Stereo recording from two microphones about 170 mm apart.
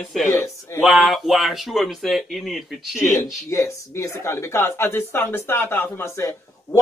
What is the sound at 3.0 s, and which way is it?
Speech, 15° left (ahead or behind).